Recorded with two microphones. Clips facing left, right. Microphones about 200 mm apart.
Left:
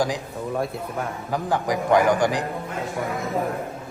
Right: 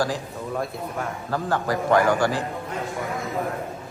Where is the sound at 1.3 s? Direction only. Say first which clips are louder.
Left 1 dB; 15° left (ahead or behind).